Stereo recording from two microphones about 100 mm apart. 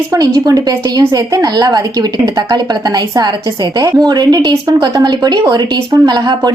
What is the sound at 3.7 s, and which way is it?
A woman's voice, 40° right (ahead or behind).